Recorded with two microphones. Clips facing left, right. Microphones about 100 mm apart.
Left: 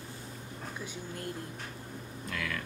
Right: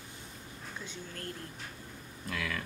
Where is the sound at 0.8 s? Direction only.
15° left (ahead or behind).